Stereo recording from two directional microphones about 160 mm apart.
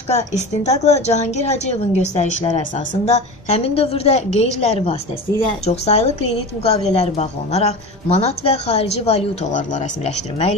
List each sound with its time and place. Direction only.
0.1 s a woman's voice: 45° left (ahead or behind)